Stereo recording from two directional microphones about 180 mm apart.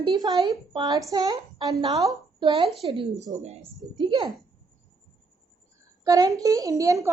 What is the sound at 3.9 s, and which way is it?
Speech, 25° right (ahead or behind).